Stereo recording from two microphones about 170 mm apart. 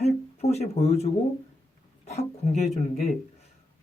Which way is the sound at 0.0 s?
40° left (ahead or behind).